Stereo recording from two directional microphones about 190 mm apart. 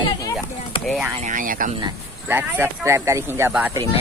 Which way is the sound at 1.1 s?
40° right (ahead or behind).